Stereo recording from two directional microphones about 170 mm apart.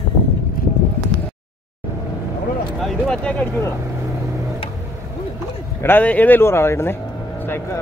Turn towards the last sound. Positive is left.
turn(degrees=15)  # may be behind; listen again after turning